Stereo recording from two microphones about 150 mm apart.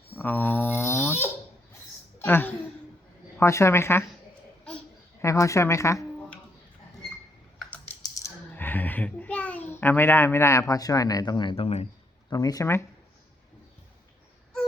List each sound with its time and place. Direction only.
0.1 s babbling: 10° left (ahead or behind)
2.2 s a woman's voice: 15° left (ahead or behind)
5.2 s speech: 20° left (ahead or behind)
8.0 s a child's voice: 15° left (ahead or behind); by 11.9 s 40° left (ahead or behind)
12.3 s speech: 25° left (ahead or behind)